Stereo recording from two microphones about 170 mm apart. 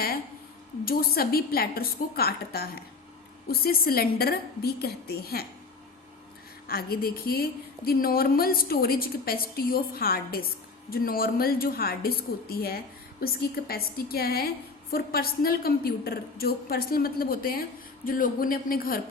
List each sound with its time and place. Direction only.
0.9 s a woman's voice: 60° left (ahead or behind)
6.7 s a woman's voice: 60° left (ahead or behind)